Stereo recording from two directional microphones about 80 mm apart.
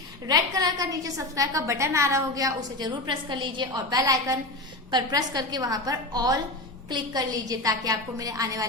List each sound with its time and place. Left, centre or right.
0.3 s a woman's voice: right
4.9 s a woman's voice: right